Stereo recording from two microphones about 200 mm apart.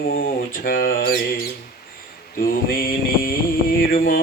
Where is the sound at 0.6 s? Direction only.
45° left (ahead or behind).